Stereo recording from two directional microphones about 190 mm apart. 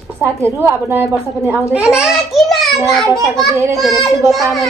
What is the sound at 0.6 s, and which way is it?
A woman's voice, 10° right (ahead or behind).